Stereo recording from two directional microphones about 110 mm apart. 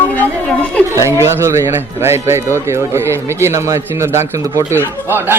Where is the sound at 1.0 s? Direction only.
25° right (ahead or behind).